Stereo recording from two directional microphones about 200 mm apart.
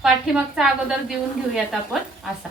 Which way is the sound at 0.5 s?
5° right (ahead or behind).